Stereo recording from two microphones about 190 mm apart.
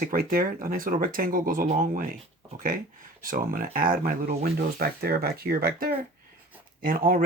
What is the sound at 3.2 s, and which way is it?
Speech, 45° right (ahead or behind).